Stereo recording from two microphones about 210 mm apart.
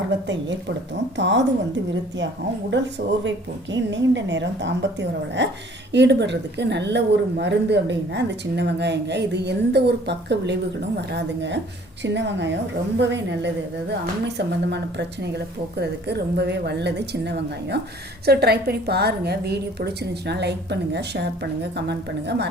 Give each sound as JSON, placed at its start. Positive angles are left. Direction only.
{"t": 1.1, "sound": "speech", "side_deg": -60}
{"t": 2.7, "sound": "a woman's voice", "side_deg": -55}